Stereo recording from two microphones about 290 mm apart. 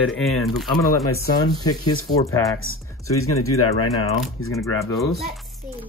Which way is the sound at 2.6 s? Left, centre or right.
Left.